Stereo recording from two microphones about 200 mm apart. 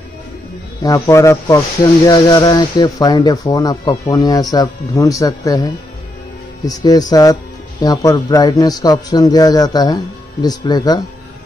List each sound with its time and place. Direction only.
0.8 s a man's voice: 15° left (ahead or behind)